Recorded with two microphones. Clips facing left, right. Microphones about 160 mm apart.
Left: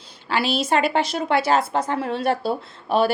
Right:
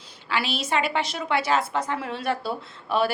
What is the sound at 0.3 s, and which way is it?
A woman's voice, 35° left (ahead or behind).